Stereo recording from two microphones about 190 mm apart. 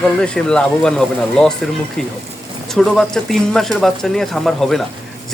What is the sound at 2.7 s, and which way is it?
Speech, centre (ahead or behind).